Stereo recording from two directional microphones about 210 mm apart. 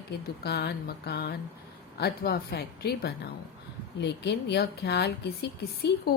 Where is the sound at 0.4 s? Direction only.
50° left (ahead or behind).